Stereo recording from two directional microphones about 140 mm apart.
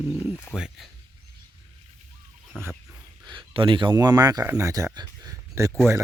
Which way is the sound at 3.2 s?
35° right (ahead or behind).